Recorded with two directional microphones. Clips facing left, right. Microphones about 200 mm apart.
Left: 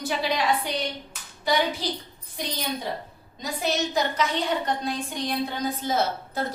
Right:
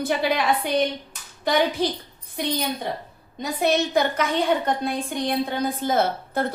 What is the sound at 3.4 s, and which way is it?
Speech, 60° right (ahead or behind).